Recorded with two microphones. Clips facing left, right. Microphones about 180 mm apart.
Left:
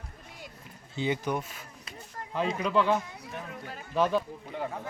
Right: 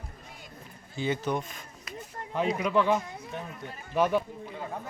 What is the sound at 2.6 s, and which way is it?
A man's voice, 15° right (ahead or behind).